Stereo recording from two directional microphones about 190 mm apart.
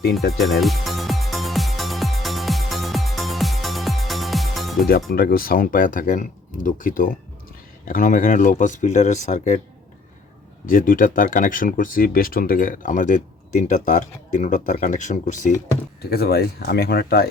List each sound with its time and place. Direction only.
0.3 s music: centre (ahead or behind)
5.1 s speech: 50° left (ahead or behind)
10.7 s speech: 45° left (ahead or behind)
16.0 s speech: 55° left (ahead or behind)